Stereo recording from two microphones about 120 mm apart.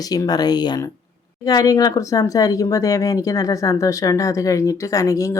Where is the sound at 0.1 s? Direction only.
35° left (ahead or behind).